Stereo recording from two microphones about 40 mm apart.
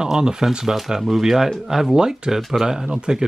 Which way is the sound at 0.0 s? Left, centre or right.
Centre.